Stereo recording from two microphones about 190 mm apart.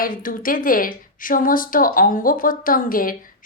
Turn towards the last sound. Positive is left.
turn(degrees=50)  # may be behind; listen again after turning